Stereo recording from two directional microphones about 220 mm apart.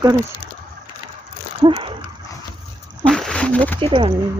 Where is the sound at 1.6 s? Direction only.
20° right (ahead or behind).